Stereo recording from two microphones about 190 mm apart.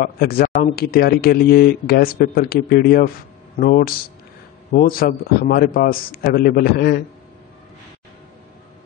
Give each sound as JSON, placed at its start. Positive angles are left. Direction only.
{"t": 0.0, "sound": "speech", "side_deg": 50}